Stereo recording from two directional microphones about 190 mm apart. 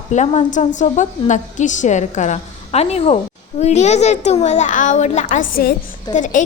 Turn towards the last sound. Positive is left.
turn(degrees=40)  # may be behind; listen again after turning